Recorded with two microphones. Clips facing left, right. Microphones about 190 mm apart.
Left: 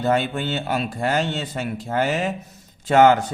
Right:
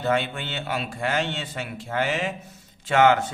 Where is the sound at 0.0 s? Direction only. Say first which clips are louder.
Left 4 dB; 40° left (ahead or behind).